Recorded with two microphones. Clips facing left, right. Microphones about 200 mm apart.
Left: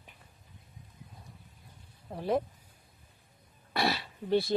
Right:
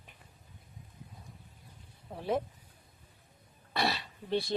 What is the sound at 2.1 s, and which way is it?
Speech, centre (ahead or behind).